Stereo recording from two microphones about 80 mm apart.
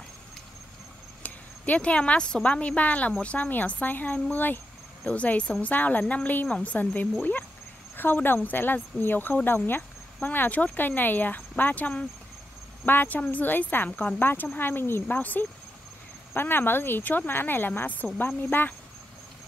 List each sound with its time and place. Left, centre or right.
1.2 s a woman's voice: centre